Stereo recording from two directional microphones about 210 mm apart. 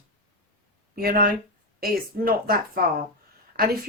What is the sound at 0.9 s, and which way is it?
Speech, 45° right (ahead or behind).